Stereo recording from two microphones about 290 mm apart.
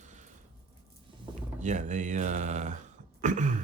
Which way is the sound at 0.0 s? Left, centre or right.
Right.